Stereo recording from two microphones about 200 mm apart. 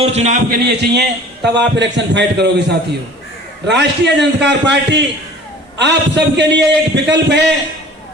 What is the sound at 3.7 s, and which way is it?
A man's voice, 60° right (ahead or behind).